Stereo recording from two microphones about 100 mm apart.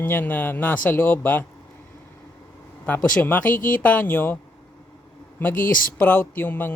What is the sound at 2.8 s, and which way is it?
Speech, 15° left (ahead or behind).